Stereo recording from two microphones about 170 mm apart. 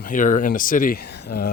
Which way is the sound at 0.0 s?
50° left (ahead or behind).